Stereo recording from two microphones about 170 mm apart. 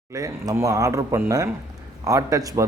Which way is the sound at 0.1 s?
20° right (ahead or behind).